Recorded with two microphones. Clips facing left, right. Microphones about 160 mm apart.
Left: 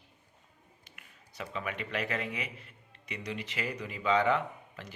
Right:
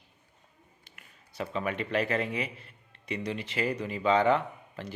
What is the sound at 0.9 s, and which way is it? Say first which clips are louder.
Speech: even; 30° right (ahead or behind).